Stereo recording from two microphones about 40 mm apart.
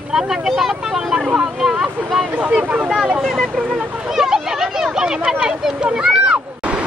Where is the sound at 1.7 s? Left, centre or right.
Right.